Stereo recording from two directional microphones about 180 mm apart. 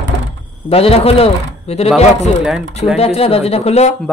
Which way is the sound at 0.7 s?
35° left (ahead or behind).